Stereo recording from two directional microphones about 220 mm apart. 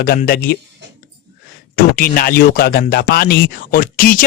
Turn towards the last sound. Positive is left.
turn(degrees=40)  # may be behind; listen again after turning